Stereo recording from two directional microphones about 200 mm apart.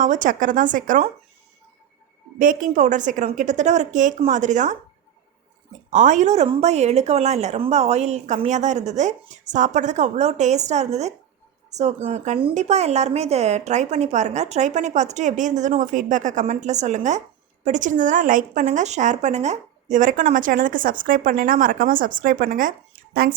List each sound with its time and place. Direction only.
0.0 s speech: 40° right (ahead or behind)
2.4 s speech: 40° right (ahead or behind)
5.9 s speech: 35° right (ahead or behind)